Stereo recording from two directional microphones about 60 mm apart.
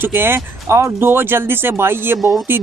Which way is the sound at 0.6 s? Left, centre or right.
Right.